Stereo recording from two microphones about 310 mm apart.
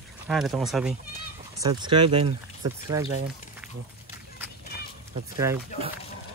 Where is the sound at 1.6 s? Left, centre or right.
Centre.